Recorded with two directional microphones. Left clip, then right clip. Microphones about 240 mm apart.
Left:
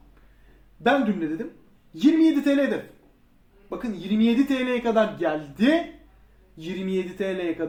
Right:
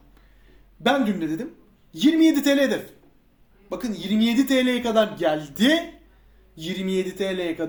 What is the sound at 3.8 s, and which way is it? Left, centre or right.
Speech, right.